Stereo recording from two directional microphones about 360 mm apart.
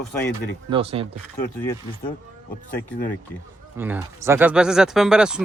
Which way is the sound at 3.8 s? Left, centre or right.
Centre.